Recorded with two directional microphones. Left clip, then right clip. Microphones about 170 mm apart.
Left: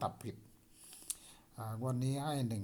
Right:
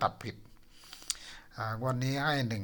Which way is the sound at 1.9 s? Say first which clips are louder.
Right 8 dB; centre (ahead or behind).